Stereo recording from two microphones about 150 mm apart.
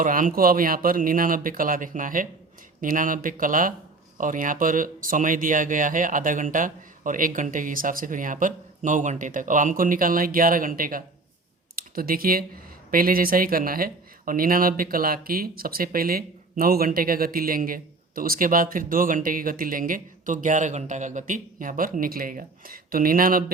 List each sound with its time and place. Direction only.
0.0 s speech: 65° right (ahead or behind)
11.8 s speech: 80° right